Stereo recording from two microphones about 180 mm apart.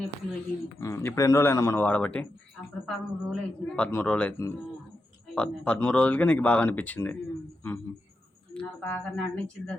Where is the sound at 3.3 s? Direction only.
5° left (ahead or behind).